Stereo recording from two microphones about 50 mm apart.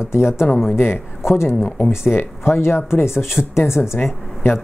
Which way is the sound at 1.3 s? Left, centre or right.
Left.